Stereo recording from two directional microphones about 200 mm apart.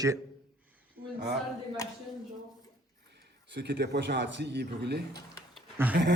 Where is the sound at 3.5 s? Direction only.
60° right (ahead or behind).